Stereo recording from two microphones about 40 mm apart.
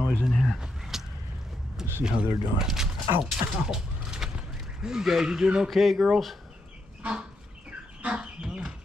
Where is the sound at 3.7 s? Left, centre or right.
Centre.